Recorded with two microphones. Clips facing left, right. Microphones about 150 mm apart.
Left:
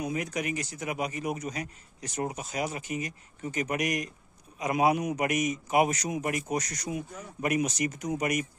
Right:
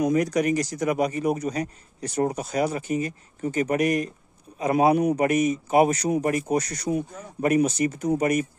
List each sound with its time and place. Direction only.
0.0 s a man's voice: 40° right (ahead or behind)